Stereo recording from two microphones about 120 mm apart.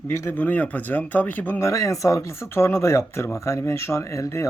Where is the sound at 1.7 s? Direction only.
25° left (ahead or behind).